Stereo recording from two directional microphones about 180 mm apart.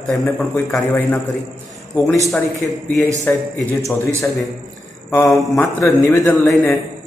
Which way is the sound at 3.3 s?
10° left (ahead or behind).